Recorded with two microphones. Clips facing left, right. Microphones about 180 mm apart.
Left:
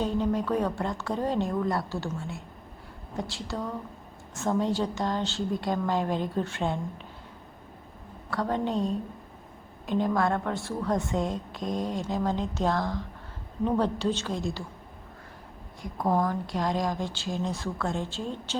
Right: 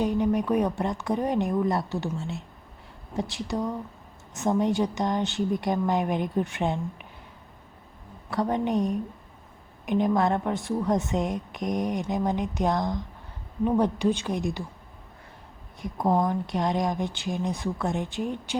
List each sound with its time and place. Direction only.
0.0 s a woman's voice: 15° right (ahead or behind)
8.3 s a woman's voice: 20° right (ahead or behind)
15.8 s speech: 20° right (ahead or behind)